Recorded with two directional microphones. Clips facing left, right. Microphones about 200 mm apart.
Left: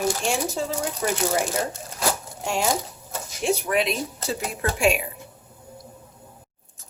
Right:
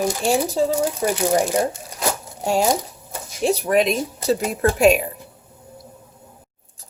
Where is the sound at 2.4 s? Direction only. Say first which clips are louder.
Right 6 dB; 35° right (ahead or behind).